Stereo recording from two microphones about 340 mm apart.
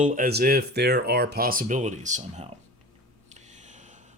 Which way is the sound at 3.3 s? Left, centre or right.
Right.